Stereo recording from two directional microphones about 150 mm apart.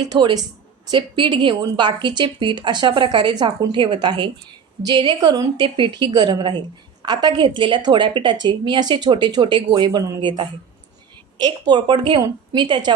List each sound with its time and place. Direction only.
0.1 s a woman's voice: 30° right (ahead or behind)